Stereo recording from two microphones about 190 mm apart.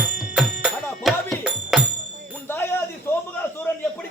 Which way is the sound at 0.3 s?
Centre (ahead or behind).